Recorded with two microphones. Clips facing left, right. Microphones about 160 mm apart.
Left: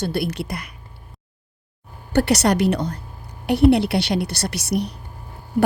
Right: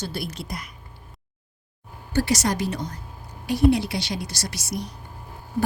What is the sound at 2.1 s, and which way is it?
A woman's voice, 65° left (ahead or behind).